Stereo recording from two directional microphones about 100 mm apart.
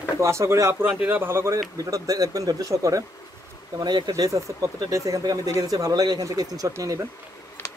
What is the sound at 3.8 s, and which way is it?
Speech, 45° right (ahead or behind).